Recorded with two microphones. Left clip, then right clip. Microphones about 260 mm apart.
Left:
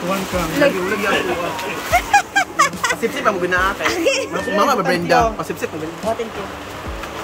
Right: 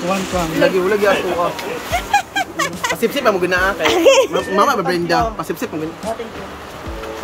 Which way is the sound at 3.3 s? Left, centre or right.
Right.